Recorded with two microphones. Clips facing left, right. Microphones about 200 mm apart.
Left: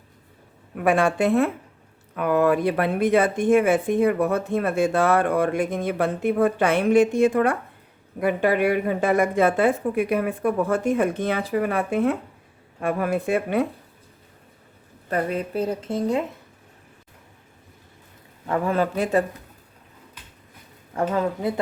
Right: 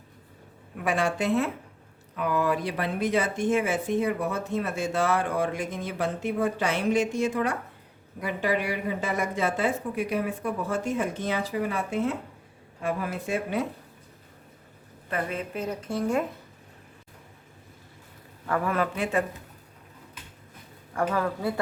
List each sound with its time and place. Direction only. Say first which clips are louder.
0.8 s speech: left 7 dB; 55° left (ahead or behind)
15.1 s a woman's voice: left 6 dB; 35° left (ahead or behind); by 16.2 s 20° left (ahead or behind)
18.4 s a woman's voice: left 4 dB; 25° left (ahead or behind)
20.9 s a woman's voice: left 3 dB; 20° left (ahead or behind)